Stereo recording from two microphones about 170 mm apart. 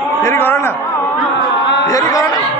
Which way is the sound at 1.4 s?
90° left.